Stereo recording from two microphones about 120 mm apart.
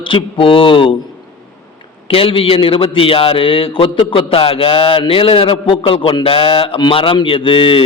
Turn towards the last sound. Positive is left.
turn(degrees=50)  # may be behind; listen again after turning